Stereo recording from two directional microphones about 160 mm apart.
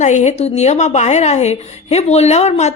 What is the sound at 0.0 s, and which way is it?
A woman's voice, 45° left (ahead or behind).